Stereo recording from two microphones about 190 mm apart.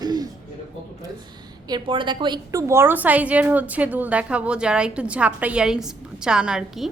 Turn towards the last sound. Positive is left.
turn(degrees=0)  # may be behind; listen again after turning